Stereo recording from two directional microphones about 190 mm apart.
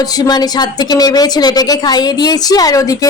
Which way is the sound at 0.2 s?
20° left (ahead or behind).